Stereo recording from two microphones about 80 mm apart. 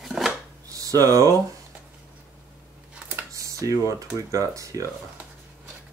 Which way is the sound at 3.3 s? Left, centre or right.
Right.